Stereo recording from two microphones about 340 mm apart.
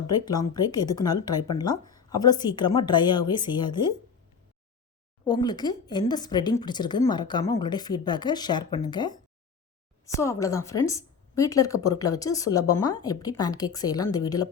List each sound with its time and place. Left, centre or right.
0.1 s a woman's voice: centre
5.2 s a woman's voice: centre
10.2 s a woman's voice: centre